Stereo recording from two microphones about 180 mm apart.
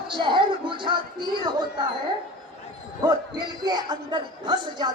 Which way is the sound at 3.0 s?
25° right (ahead or behind).